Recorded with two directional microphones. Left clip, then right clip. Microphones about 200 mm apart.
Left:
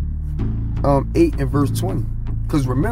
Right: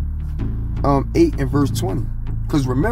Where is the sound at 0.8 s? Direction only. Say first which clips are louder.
Even; 15° left (ahead or behind).